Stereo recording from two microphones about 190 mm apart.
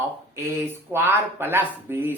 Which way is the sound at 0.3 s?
15° right (ahead or behind).